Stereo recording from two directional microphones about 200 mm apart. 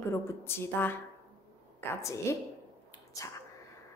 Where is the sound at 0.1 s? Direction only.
10° left (ahead or behind).